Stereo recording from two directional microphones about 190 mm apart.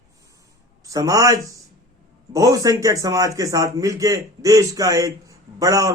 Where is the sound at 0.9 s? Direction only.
15° right (ahead or behind).